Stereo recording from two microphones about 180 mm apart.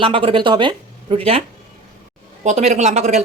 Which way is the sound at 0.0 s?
30° right (ahead or behind).